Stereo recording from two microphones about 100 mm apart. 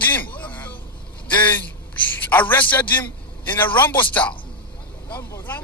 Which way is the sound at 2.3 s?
15° left (ahead or behind).